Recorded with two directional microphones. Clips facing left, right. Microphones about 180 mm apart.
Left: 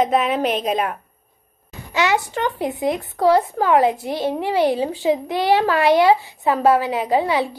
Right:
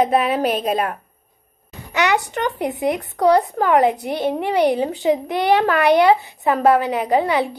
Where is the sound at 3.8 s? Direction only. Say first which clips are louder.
Right 1 dB; 20° right (ahead or behind).